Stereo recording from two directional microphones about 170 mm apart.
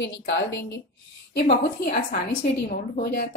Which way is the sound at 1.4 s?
60° left (ahead or behind).